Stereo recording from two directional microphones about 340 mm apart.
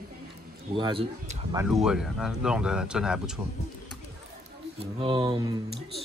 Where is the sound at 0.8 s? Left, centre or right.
Centre.